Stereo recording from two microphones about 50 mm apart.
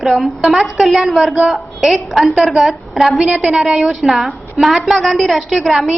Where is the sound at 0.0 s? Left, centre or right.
Centre.